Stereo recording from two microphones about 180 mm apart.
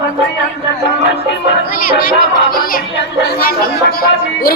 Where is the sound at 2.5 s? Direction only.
60° left (ahead or behind).